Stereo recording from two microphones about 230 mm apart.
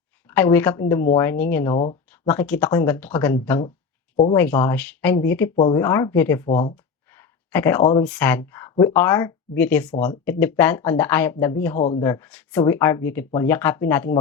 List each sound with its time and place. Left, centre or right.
0.3 s speech: centre
5.5 s speech: left
5.8 s speech: centre
6.5 s speech: left
7.2 s a sound: centre
8.0 s speech: centre
11.8 s speech: left
12.0 s speech: centre